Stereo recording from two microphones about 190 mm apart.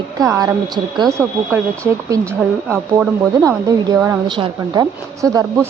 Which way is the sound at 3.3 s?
20° right (ahead or behind).